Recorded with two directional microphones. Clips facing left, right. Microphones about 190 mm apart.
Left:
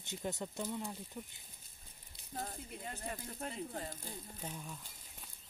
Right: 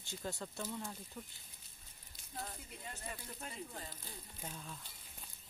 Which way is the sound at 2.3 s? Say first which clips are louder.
Left 4 dB; 45° left (ahead or behind).